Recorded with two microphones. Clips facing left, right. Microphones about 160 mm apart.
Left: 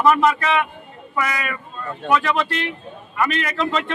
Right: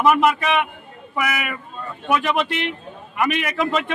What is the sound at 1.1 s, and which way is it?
Speech, 15° right (ahead or behind).